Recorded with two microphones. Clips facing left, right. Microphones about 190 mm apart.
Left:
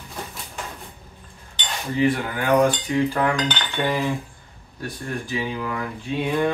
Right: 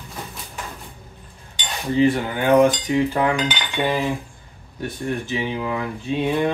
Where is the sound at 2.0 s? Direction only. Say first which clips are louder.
Right 3 dB; 25° right (ahead or behind).